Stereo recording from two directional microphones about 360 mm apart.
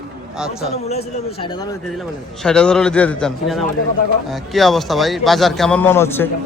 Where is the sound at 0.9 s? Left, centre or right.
Centre.